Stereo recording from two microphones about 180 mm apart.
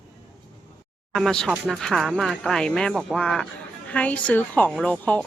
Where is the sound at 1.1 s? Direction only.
5° left (ahead or behind).